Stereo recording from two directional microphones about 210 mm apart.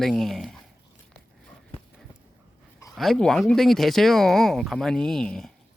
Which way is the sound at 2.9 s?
Centre (ahead or behind).